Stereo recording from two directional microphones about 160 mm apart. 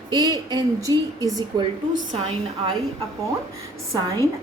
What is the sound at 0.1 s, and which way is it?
A woman's voice, 25° right (ahead or behind).